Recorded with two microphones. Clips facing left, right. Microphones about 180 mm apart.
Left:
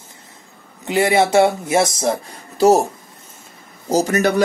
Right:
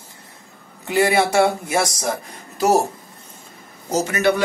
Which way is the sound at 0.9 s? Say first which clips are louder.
Left 2 dB; 20° left (ahead or behind).